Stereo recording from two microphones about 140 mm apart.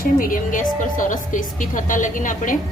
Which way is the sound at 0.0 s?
85° left.